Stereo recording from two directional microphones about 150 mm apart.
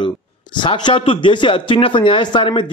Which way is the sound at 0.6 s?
35° left (ahead or behind).